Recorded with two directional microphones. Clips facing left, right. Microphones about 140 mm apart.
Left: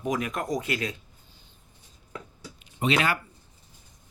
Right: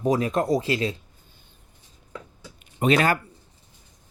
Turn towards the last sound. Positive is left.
turn(degrees=-45)  # may be behind; listen again after turning